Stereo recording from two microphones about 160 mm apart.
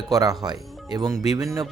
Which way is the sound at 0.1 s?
20° right (ahead or behind).